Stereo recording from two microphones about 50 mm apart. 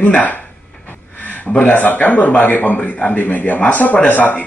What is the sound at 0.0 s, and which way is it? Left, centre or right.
Speech, left.